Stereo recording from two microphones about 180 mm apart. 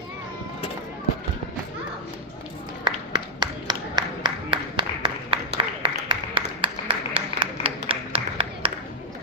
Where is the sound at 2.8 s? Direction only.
25° right (ahead or behind).